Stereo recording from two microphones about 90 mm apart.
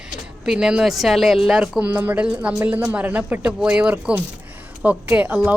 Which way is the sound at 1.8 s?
15° right (ahead or behind).